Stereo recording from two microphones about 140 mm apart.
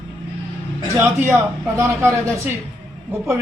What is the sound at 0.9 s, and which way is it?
Speech, 15° right (ahead or behind).